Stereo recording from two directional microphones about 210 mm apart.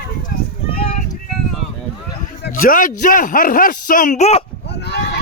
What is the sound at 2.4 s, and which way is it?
Speech, 40° left (ahead or behind).